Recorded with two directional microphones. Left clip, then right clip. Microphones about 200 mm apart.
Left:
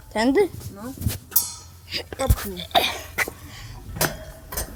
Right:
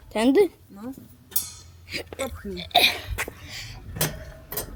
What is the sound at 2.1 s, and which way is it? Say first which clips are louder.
Speech: left 7 dB; 35° right (ahead or behind).